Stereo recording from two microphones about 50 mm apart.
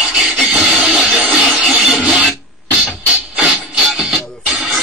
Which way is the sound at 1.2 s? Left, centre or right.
Right.